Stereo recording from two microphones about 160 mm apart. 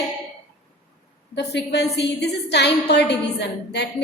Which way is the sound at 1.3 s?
90° left.